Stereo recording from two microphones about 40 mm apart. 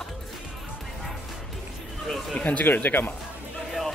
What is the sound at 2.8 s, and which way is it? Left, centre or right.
Speech, left.